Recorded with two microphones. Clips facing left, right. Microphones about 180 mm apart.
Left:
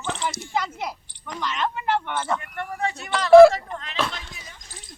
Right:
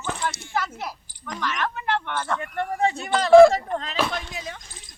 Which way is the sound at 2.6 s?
30° right (ahead or behind).